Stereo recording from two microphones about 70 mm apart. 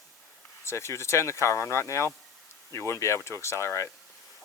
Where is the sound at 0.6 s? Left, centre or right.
Left.